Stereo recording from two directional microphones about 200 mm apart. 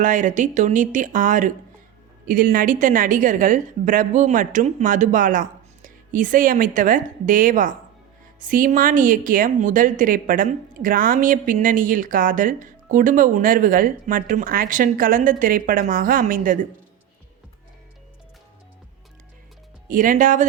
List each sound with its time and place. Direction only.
0.0 s a woman's voice: 40° right (ahead or behind)
19.9 s a woman's voice: 40° right (ahead or behind)